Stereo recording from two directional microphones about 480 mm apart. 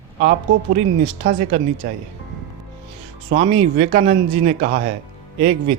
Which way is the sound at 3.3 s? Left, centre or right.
Centre.